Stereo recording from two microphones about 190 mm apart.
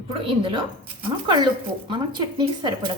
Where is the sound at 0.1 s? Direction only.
25° right (ahead or behind).